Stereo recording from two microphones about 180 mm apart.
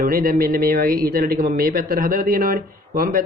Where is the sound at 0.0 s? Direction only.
50° right (ahead or behind).